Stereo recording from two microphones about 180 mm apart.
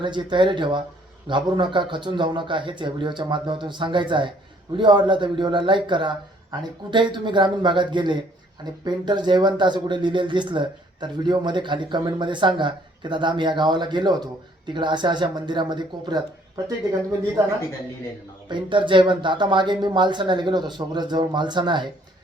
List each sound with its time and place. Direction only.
0.0 s speech: 25° right (ahead or behind)
18.4 s speech: 25° right (ahead or behind)